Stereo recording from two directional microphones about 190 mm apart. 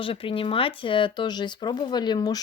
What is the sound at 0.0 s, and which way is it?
Speech, 30° left (ahead or behind).